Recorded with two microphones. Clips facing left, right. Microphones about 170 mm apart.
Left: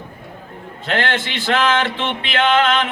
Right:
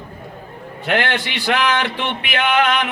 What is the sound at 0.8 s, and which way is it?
Mantra, 15° right (ahead or behind).